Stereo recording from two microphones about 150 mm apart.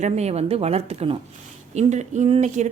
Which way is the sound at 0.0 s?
45° right (ahead or behind).